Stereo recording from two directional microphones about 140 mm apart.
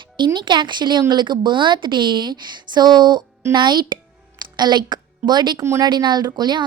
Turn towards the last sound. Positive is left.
turn(degrees=-30)  # may be behind; listen again after turning